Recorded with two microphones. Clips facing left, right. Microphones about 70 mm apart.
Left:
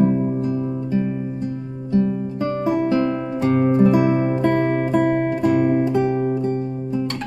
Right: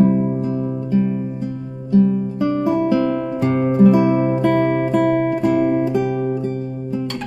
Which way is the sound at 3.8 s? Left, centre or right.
Left.